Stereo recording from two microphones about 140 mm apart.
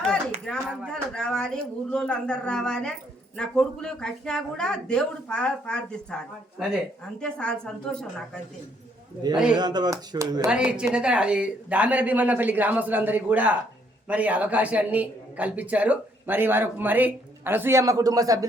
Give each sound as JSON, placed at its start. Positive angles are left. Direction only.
{"t": 0.4, "sound": "a sound", "side_deg": 5}
{"t": 0.9, "sound": "speech", "side_deg": 5}
{"t": 9.6, "sound": "speech", "side_deg": -30}
{"t": 10.5, "sound": "speech", "side_deg": -5}